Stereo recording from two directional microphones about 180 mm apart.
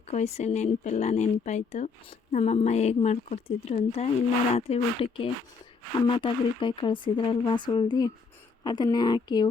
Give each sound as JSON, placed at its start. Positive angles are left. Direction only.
{"t": 0.1, "sound": "speech", "side_deg": 40}